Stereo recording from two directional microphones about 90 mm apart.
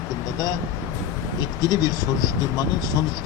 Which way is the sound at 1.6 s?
45° left (ahead or behind).